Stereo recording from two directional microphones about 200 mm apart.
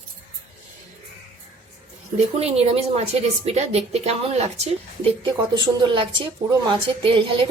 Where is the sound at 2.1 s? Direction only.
30° right (ahead or behind).